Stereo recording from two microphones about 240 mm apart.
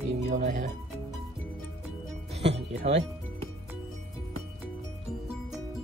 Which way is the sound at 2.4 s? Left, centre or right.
Right.